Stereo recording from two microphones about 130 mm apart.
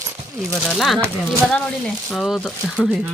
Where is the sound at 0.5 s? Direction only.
5° left (ahead or behind).